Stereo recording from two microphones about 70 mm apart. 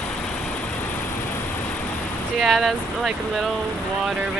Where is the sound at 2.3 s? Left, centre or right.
Centre.